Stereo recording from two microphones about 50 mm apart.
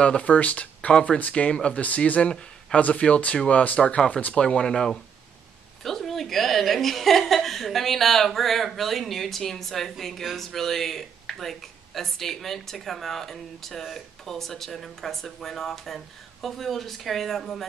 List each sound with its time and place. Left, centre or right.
0.0 s a woman's voice: left; by 17.6 s centre